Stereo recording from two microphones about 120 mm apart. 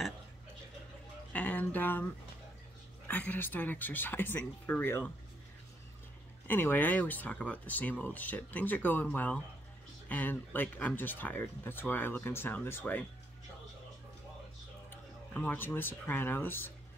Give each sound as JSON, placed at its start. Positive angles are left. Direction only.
{"t": 1.3, "sound": "music", "side_deg": 15}
{"t": 3.1, "sound": "speech", "side_deg": 15}
{"t": 6.4, "sound": "speech", "side_deg": 15}
{"t": 15.3, "sound": "speech", "side_deg": 15}